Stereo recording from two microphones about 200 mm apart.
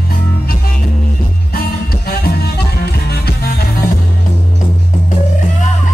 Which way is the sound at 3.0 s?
50° left (ahead or behind).